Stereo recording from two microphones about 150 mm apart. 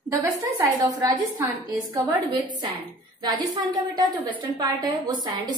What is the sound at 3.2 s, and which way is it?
A woman's voice, 25° right (ahead or behind).